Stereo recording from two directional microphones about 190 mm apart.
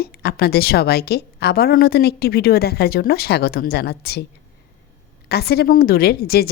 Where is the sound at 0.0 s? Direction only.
55° left (ahead or behind).